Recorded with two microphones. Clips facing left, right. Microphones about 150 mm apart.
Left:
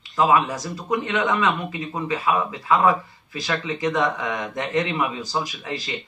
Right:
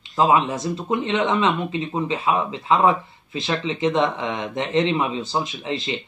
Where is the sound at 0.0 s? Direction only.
25° right (ahead or behind).